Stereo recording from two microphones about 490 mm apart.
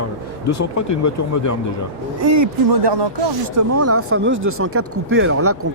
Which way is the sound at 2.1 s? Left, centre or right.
Right.